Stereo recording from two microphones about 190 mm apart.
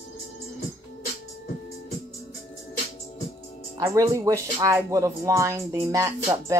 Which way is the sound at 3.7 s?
15° right (ahead or behind).